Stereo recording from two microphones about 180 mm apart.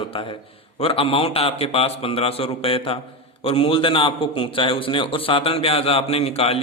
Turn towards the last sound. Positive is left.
turn(degrees=35)  # may be behind; listen again after turning